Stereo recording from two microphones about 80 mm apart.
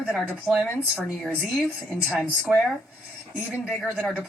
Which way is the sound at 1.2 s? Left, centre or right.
Centre.